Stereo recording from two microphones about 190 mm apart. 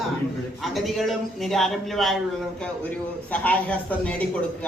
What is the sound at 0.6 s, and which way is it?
A man's voice, centre (ahead or behind).